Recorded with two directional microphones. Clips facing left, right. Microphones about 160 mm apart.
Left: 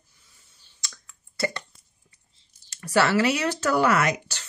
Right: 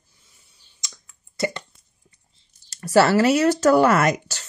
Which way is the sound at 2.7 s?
40° right (ahead or behind).